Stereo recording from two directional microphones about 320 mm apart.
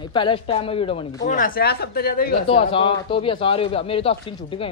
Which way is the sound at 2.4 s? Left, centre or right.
Centre.